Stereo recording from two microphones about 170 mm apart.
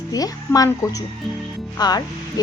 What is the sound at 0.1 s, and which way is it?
Speech, 20° left (ahead or behind).